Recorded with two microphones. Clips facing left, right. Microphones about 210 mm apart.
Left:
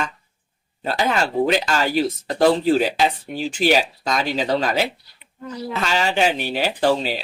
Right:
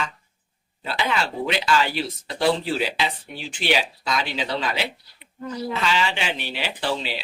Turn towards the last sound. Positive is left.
turn(degrees=45)  # may be behind; listen again after turning